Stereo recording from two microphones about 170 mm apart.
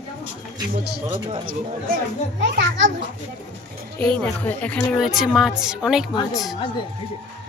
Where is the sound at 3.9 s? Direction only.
5° left (ahead or behind).